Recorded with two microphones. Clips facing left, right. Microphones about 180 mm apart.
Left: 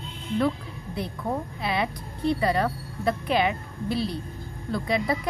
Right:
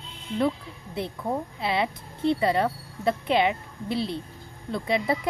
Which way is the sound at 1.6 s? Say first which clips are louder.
Right 1 dB; 25° right (ahead or behind).